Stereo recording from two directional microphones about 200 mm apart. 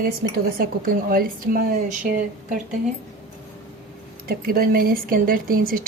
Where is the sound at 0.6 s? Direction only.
45° right (ahead or behind).